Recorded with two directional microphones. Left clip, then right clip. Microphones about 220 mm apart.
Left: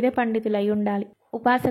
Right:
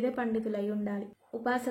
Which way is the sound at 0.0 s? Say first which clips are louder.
Left 9 dB; 30° left (ahead or behind).